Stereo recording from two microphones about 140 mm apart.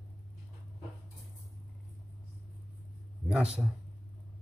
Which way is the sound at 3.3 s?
10° right (ahead or behind).